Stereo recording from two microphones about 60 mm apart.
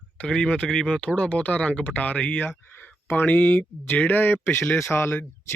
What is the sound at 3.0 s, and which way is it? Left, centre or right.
Speech, left.